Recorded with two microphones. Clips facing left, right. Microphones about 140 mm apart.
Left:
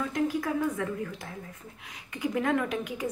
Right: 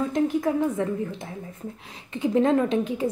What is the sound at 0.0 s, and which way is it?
A woman's voice, 25° right (ahead or behind).